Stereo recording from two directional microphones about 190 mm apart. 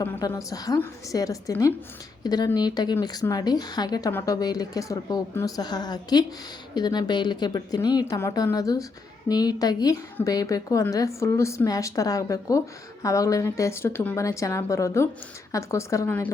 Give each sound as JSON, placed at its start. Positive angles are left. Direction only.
{"t": 0.0, "sound": "a woman's voice", "side_deg": 15}